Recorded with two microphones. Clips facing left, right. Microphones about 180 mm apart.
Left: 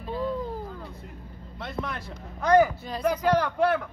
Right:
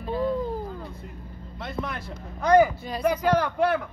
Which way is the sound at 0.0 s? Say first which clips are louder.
Right 3 dB; 60° right (ahead or behind).